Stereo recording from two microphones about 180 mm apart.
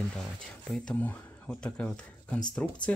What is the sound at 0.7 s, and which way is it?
Speech, 5° left (ahead or behind).